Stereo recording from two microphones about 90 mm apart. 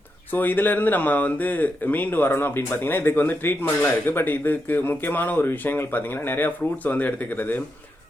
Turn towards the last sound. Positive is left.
turn(degrees=20)  # may be behind; listen again after turning